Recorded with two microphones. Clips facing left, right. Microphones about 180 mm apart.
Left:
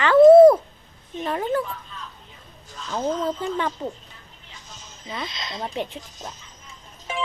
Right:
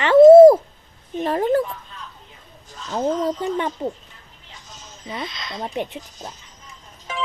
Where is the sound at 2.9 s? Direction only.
20° right (ahead or behind).